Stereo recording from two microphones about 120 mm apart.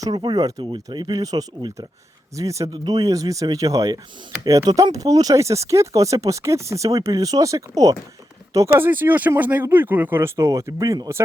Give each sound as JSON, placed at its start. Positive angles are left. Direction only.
{"t": 0.0, "sound": "speech", "side_deg": -35}